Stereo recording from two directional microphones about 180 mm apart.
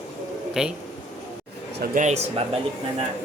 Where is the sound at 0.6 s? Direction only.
5° right (ahead or behind).